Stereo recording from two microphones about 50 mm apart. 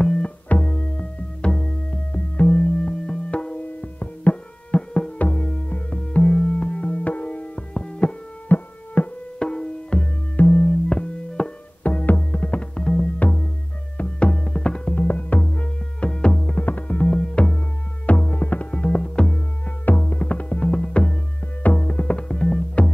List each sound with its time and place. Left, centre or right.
0.0 s music: centre
0.5 s music: left
1.5 s music: centre
2.1 s music: left
5.2 s music: left
8.5 s music: left
9.4 s tabla: centre
10.3 s music: left
10.9 s music: centre
11.8 s music: left
15.0 s music: left
16.5 s music: left
19.8 s music: left
21.6 s music: left